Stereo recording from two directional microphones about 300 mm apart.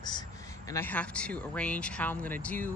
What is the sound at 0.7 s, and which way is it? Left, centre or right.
A woman's voice, centre.